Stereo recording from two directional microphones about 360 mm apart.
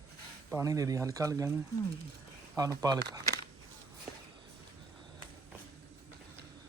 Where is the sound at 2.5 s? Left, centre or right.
Centre.